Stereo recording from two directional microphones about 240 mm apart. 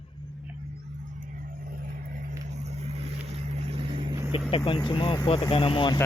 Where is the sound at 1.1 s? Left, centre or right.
Right.